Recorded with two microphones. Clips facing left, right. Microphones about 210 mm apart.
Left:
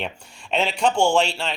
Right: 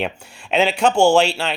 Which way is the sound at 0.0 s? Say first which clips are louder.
Right 6 dB; 5° right (ahead or behind).